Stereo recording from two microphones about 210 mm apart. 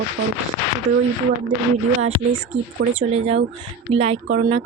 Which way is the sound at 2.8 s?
45° right (ahead or behind).